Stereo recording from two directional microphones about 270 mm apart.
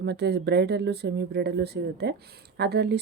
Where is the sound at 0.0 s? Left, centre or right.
Right.